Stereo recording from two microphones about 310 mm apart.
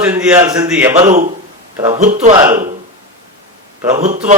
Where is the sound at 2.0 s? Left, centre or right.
Right.